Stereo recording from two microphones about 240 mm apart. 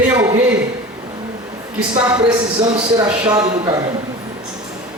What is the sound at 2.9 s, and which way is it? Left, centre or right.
Speech, centre.